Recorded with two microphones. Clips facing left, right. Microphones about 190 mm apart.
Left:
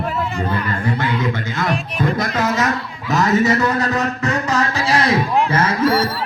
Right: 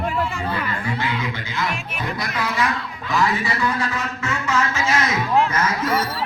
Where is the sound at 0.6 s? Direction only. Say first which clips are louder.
Left 4 dB; 50° left (ahead or behind).